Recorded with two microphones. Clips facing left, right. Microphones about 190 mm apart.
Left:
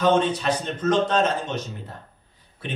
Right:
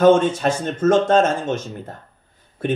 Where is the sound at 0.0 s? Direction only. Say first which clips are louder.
Right 6 dB; 50° right (ahead or behind).